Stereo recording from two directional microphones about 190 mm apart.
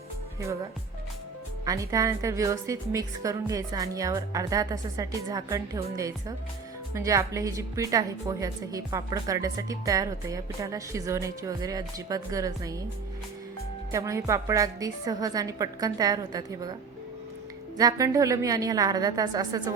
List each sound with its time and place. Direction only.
1.6 s a woman's voice: 15° right (ahead or behind)
13.9 s a woman's voice: 15° right (ahead or behind)
17.7 s a woman's voice: 20° right (ahead or behind)